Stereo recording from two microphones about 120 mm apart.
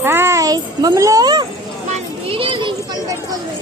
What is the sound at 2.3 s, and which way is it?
Children playing, 50° right (ahead or behind).